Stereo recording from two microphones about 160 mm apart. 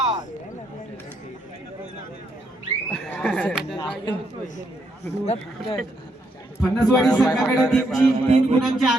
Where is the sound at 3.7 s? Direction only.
30° left (ahead or behind).